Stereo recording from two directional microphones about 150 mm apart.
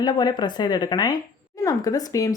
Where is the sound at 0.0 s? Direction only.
30° left (ahead or behind).